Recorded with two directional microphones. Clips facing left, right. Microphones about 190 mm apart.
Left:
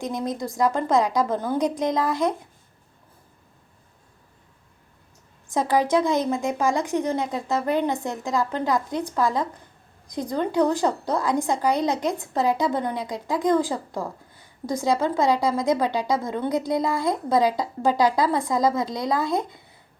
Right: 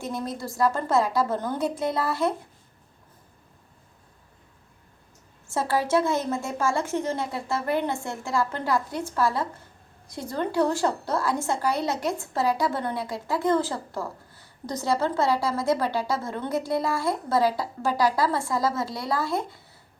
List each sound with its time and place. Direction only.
0.0 s a woman's voice: 15° left (ahead or behind)
5.5 s a woman's voice: 15° left (ahead or behind)